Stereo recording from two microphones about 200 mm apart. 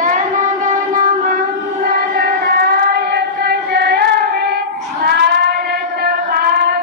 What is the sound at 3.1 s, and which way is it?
Female singing, 55° right (ahead or behind).